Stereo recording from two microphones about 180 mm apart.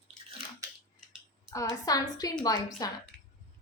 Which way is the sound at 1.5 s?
20° left (ahead or behind).